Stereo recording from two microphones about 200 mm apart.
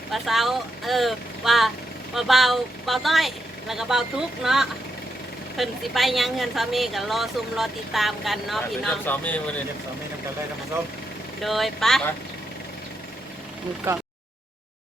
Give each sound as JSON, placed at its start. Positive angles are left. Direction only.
{"t": 0.1, "sound": "a woman's voice", "side_deg": 0}
{"t": 11.4, "sound": "a woman's voice", "side_deg": 0}